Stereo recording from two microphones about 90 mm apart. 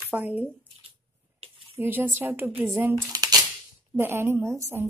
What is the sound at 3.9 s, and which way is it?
Speech, 25° right (ahead or behind).